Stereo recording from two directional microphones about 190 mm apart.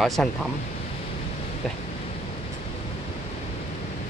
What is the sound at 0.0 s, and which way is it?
Speech, centre (ahead or behind).